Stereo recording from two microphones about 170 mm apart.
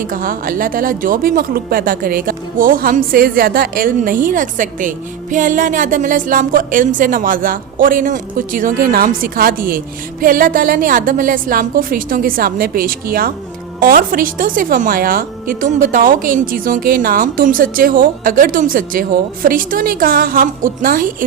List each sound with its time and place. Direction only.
0.1 s a woman's voice: 55° right (ahead or behind)